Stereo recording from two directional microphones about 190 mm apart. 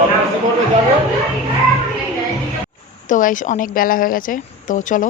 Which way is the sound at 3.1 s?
45° left (ahead or behind).